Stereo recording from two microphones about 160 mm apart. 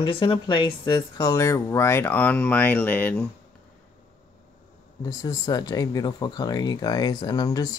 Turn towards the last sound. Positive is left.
turn(degrees=25)  # may be behind; listen again after turning